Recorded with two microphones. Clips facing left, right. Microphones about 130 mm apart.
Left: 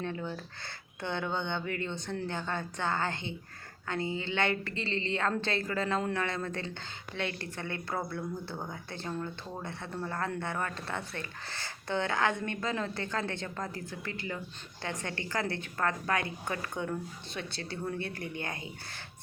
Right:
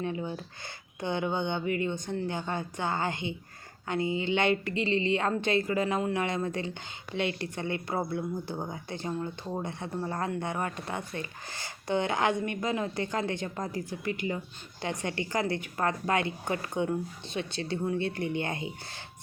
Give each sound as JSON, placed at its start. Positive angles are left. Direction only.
{"t": 0.0, "sound": "a woman's voice", "side_deg": -15}